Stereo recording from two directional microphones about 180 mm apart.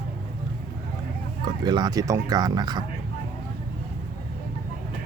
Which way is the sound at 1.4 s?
25° right (ahead or behind).